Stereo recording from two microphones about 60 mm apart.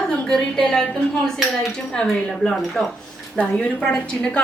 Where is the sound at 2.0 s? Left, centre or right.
Centre.